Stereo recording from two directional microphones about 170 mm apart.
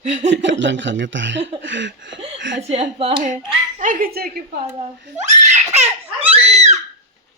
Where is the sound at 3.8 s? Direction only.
55° right (ahead or behind).